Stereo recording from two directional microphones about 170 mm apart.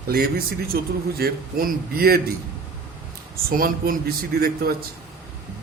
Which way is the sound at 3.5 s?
60° right (ahead or behind).